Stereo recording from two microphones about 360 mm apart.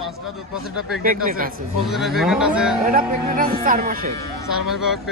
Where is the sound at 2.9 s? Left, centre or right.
Right.